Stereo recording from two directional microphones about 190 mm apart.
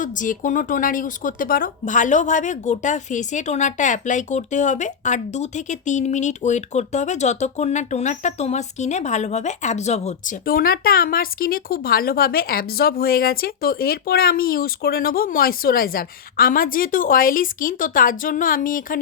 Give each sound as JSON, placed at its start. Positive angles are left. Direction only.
{"t": 0.0, "sound": "a woman's voice", "side_deg": 40}
{"t": 10.4, "sound": "speech", "side_deg": 50}